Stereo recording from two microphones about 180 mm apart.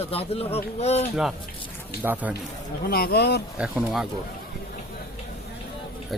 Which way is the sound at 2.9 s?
60° left (ahead or behind).